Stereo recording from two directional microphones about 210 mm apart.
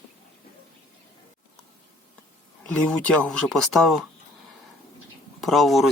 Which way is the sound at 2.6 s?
5° left (ahead or behind).